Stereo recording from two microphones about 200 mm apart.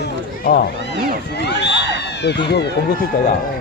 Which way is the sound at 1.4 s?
60° left (ahead or behind).